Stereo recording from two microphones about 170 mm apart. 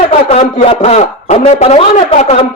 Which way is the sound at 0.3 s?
40° left (ahead or behind).